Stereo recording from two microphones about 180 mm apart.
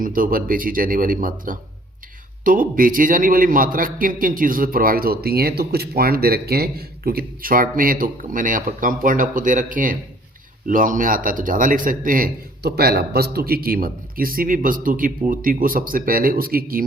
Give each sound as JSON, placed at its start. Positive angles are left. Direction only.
{"t": 0.0, "sound": "a man's voice", "side_deg": -50}